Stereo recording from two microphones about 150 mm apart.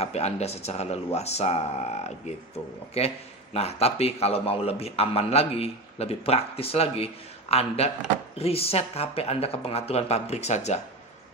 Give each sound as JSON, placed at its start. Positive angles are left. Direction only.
{"t": 0.0, "sound": "a man's voice", "side_deg": 45}